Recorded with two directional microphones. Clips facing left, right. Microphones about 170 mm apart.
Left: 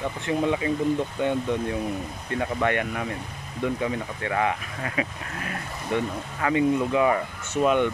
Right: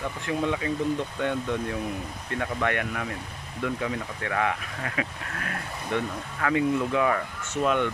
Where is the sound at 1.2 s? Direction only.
15° left (ahead or behind).